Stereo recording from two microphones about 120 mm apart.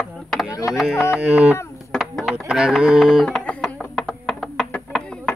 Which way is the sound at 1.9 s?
Centre (ahead or behind).